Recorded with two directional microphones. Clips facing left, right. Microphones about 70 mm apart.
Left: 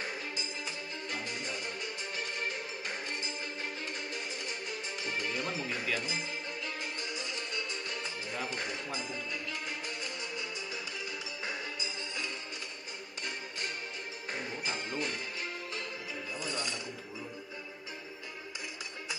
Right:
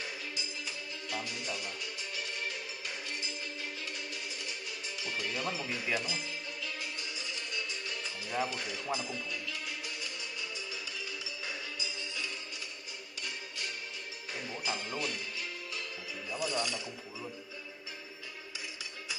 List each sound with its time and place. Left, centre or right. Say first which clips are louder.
0.0 s music: left 2 dB; left
8.5 s speech: left 1 dB; left
8.9 s music: right 1 dB; left
11.4 s music: left 3 dB; left
14.3 s music: even; left
16.3 s speech: right 5 dB; left